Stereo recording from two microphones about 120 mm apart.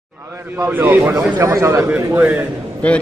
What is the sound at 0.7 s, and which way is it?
A man's voice, 15° right (ahead or behind).